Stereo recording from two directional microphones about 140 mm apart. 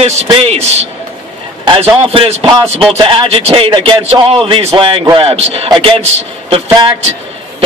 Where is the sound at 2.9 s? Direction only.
40° right (ahead or behind).